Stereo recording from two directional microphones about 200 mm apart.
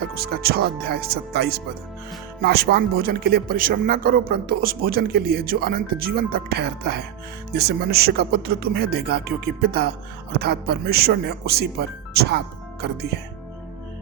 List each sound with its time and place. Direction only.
0.0 s speech: 50° right (ahead or behind)